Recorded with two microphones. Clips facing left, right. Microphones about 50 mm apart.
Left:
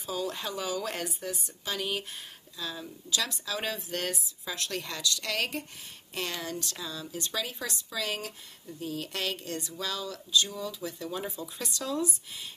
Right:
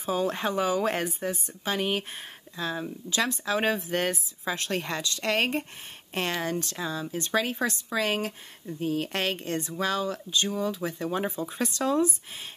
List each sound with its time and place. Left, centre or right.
0.0 s speech: right